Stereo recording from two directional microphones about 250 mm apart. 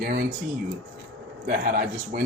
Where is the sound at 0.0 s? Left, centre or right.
Right.